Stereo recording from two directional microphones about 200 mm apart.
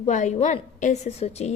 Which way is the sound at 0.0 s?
35° left (ahead or behind).